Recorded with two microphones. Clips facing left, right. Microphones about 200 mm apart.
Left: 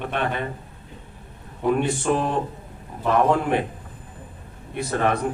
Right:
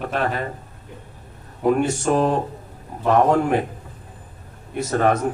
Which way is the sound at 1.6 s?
45° right (ahead or behind).